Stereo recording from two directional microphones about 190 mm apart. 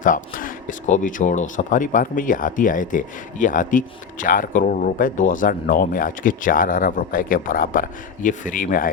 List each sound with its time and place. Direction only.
0.0 s speech: 45° left (ahead or behind)